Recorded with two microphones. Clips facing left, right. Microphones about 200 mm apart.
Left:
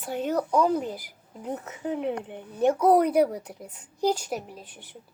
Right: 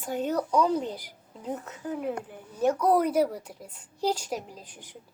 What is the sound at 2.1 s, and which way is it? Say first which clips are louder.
Speech: left 2 dB; 25° left (ahead or behind).